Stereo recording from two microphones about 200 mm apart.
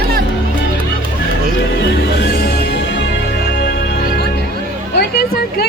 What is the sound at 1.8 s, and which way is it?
Music, 55° left (ahead or behind).